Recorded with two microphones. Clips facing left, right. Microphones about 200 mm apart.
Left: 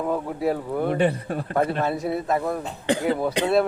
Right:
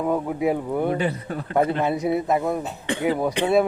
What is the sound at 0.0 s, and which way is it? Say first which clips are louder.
Speech: right 2 dB; 5° right (ahead or behind).